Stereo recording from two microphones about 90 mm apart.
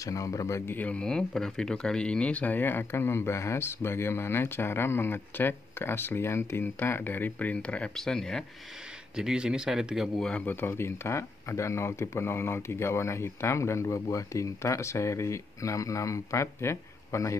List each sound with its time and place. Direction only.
0.0 s speech: 40° left (ahead or behind); by 8.5 s 5° left (ahead or behind)
9.1 s speech: 10° right (ahead or behind)
10.3 s speech: 20° left (ahead or behind)